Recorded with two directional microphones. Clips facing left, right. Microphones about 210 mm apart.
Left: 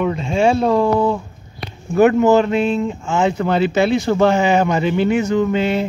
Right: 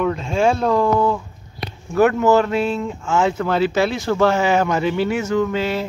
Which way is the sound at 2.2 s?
20° left (ahead or behind).